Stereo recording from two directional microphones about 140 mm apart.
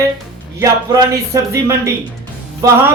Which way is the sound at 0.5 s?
20° right (ahead or behind).